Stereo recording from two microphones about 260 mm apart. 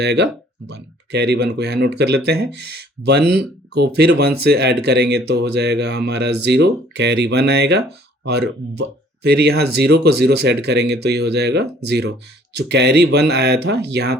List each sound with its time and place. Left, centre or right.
0.0 s speech: right